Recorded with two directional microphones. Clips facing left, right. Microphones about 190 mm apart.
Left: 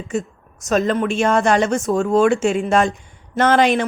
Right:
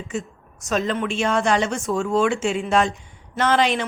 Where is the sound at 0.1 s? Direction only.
45° left (ahead or behind).